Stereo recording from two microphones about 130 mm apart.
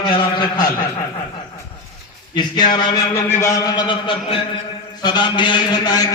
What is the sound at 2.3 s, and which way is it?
A man's voice, 35° left (ahead or behind).